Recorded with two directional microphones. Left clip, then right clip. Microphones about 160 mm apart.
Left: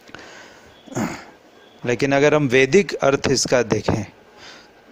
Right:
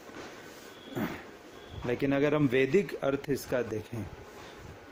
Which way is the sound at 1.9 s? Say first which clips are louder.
Left 12 dB; 60° left (ahead or behind).